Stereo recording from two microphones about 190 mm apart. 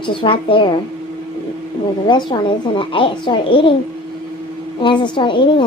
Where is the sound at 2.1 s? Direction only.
25° left (ahead or behind).